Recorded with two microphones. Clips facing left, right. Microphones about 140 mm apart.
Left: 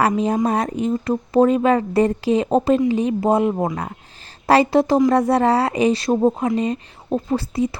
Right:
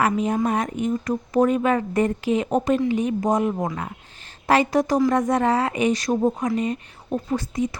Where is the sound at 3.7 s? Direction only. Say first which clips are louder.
Left 3 dB; 40° left (ahead or behind).